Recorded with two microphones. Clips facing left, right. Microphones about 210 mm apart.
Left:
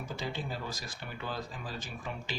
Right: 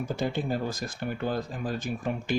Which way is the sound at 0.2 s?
50° right (ahead or behind).